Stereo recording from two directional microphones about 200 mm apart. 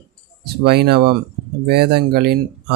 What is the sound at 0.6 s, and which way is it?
Speech, 55° right (ahead or behind).